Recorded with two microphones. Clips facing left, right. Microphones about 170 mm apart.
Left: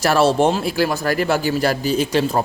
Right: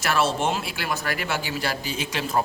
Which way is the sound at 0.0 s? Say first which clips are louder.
Left 8 dB; 35° left (ahead or behind).